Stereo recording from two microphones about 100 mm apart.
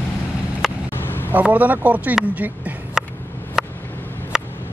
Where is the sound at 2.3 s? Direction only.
15° right (ahead or behind).